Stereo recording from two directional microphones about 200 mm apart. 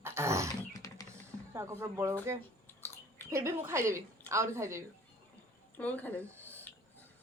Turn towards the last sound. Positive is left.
turn(degrees=-10)  # may be behind; listen again after turning